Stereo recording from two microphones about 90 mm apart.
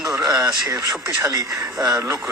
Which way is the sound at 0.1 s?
35° right (ahead or behind).